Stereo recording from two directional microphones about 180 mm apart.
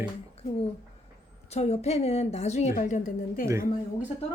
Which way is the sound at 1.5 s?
35° left (ahead or behind).